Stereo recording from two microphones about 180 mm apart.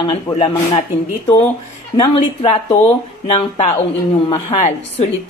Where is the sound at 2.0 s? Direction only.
30° left (ahead or behind).